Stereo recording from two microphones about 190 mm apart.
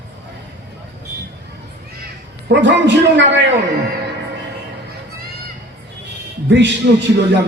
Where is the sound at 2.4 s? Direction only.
70° right (ahead or behind).